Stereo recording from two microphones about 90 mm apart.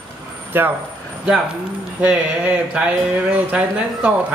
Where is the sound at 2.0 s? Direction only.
15° right (ahead or behind).